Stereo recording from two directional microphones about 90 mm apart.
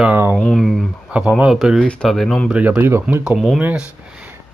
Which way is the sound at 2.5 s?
20° right (ahead or behind).